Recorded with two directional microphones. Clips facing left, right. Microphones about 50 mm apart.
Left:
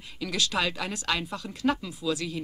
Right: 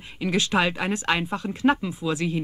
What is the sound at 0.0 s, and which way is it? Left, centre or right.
Speech, right.